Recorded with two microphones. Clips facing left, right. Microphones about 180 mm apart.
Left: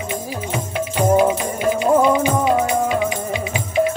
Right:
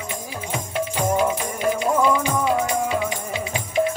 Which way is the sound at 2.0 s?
20° left (ahead or behind).